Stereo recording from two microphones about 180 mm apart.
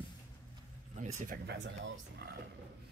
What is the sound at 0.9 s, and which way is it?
Speech, 40° right (ahead or behind).